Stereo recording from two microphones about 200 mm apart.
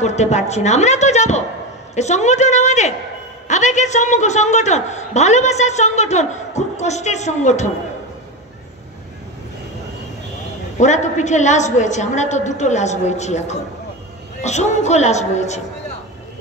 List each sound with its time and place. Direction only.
0.0 s a man's voice: 35° left (ahead or behind)
10.8 s a man's voice: 35° left (ahead or behind)